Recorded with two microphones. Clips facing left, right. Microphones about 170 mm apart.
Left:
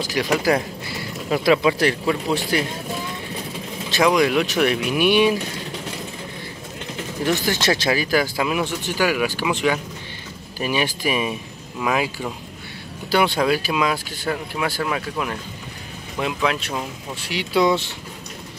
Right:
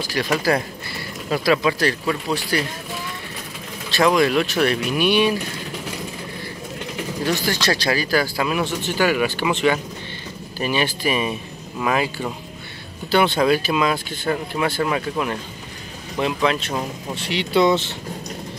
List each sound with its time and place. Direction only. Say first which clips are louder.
0.0 s speech: left 1 dB; 15° left (ahead or behind)
4.1 s speech: even; 15° left (ahead or behind)
7.4 s speech: left 1 dB; 20° left (ahead or behind)